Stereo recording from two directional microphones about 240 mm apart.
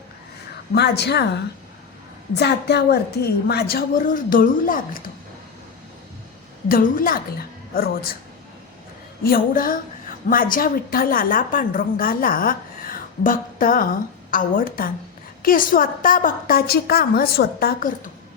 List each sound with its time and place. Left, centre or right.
0.7 s a woman's voice: left
6.7 s a woman's voice: left
9.2 s a woman's voice: left